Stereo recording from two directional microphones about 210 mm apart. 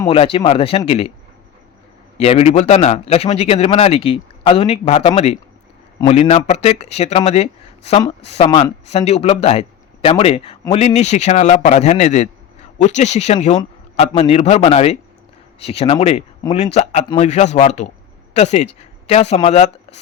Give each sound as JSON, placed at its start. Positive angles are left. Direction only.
{"t": 0.1, "sound": "a man's voice", "side_deg": 25}
{"t": 2.1, "sound": "a man's voice", "side_deg": 30}